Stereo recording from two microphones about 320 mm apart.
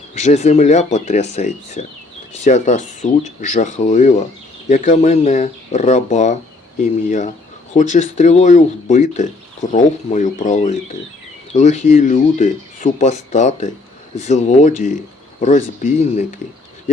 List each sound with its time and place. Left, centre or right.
0.1 s speech: left
7.7 s speech: left